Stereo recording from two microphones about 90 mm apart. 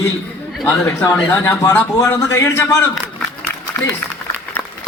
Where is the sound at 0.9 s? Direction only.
20° left (ahead or behind).